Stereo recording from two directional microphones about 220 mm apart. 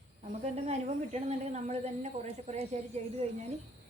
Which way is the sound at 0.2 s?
30° right (ahead or behind).